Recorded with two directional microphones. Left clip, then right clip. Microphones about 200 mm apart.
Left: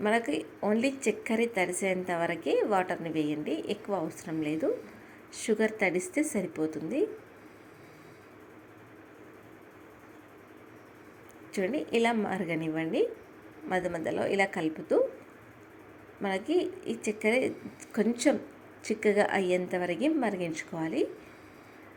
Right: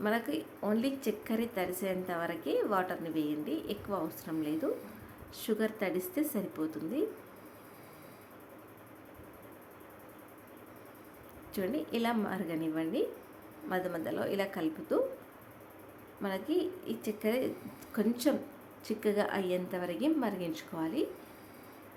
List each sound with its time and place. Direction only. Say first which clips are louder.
0.3 s a woman's voice: left 5 dB; 10° left (ahead or behind)
11.5 s a woman's voice: left 6 dB; 10° left (ahead or behind)
16.2 s a woman's voice: left 4 dB; 10° left (ahead or behind)